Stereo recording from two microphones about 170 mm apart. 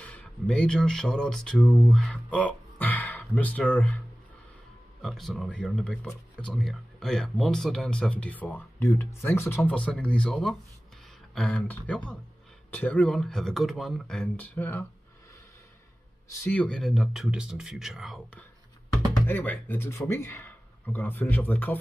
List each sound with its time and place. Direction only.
0.0 s speech: 5° left (ahead or behind)
5.0 s speech: centre (ahead or behind)
16.3 s speech: 10° left (ahead or behind)
19.2 s speech: 10° left (ahead or behind)